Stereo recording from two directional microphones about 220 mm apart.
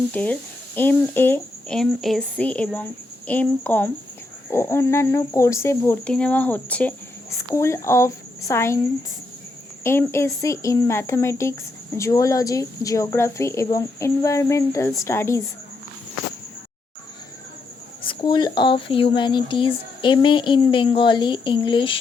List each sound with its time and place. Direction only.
0.1 s a woman's voice: 5° left (ahead or behind)
9.8 s speech: 10° left (ahead or behind)
18.0 s speech: 20° left (ahead or behind)